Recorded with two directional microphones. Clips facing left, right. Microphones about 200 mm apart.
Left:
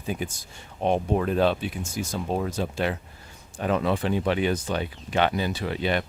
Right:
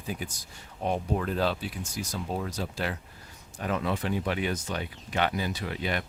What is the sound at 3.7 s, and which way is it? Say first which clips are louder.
Speech: left 5 dB; 90° left.